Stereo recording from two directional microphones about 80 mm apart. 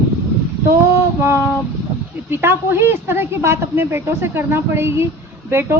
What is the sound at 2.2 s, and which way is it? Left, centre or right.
A woman's voice, right.